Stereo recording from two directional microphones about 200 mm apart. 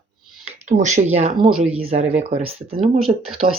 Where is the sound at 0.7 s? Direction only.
40° right (ahead or behind).